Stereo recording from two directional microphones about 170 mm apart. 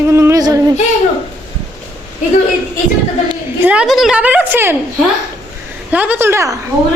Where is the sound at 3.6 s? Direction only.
5° right (ahead or behind).